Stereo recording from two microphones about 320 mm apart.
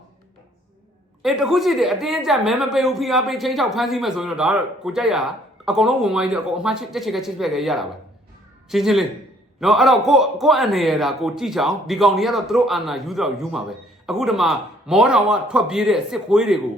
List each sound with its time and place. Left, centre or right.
1.2 s a woman's voice: centre